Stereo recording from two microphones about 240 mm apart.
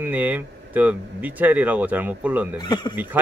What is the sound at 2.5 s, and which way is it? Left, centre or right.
Speech, centre.